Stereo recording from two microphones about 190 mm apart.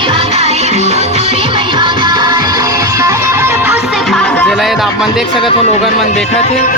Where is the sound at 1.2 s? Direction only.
40° left (ahead or behind).